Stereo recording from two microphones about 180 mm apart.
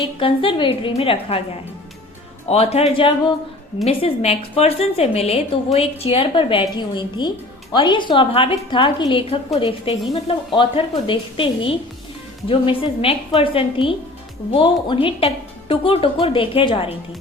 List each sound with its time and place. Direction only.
0.2 s a woman's voice: 30° left (ahead or behind)